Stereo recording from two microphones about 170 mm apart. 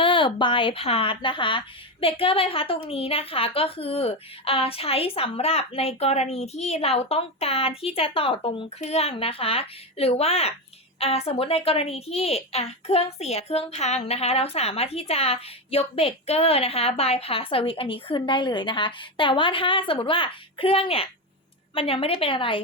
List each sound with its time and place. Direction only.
0.0 s a woman's voice: 30° left (ahead or behind)